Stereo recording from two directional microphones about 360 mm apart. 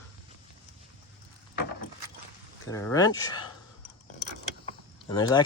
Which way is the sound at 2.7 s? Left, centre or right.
Centre.